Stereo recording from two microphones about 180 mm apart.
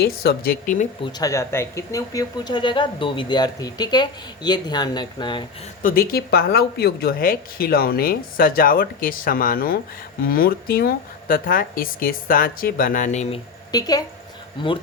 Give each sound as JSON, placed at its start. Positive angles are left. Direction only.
{"t": 0.0, "sound": "speech", "side_deg": 60}
{"t": 1.0, "sound": "speech", "side_deg": 20}
{"t": 5.8, "sound": "speech", "side_deg": 55}
{"t": 13.7, "sound": "a woman's voice", "side_deg": 20}